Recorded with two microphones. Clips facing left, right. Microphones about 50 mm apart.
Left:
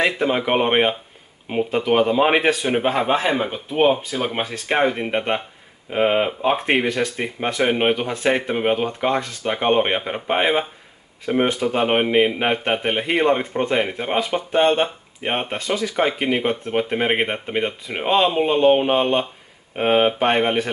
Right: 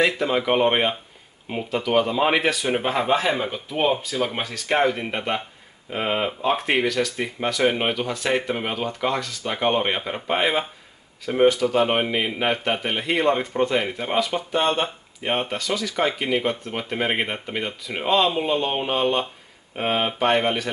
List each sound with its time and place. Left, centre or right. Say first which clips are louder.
0.0 s speech: left 1 dB; centre